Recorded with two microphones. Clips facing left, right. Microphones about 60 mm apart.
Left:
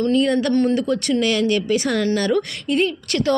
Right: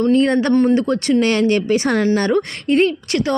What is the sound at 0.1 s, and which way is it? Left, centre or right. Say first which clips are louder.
Speech: right 4 dB; right.